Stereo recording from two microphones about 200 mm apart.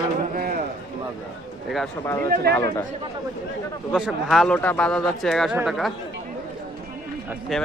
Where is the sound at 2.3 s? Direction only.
50° right (ahead or behind).